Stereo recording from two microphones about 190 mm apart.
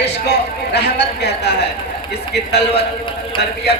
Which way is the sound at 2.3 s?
60° left (ahead or behind).